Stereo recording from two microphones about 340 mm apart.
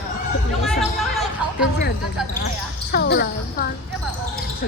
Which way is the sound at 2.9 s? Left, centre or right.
Left.